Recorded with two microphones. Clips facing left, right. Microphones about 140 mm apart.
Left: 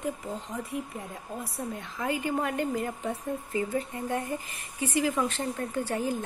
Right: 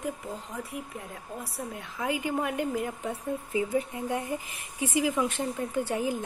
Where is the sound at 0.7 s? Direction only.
5° right (ahead or behind).